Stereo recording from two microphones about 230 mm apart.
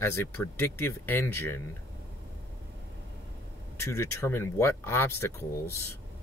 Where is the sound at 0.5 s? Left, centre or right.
Centre.